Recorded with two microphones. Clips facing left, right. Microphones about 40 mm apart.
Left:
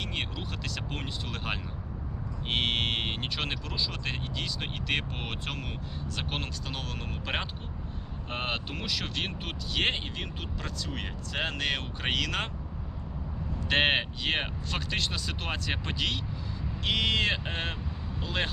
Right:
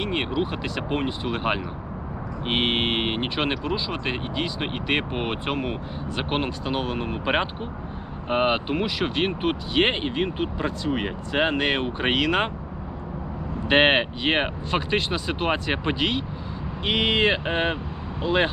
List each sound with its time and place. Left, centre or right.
0.0 s speech: right
13.7 s speech: right